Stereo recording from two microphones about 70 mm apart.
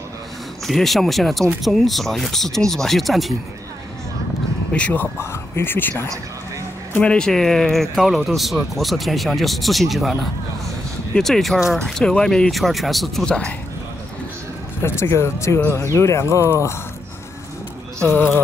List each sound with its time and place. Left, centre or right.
0.7 s speech: centre
4.7 s speech: centre
5.3 s speech: left
7.0 s speech: centre
11.1 s speech: centre
13.2 s speech: centre
14.8 s speech: left
15.9 s speech: left
18.0 s speech: left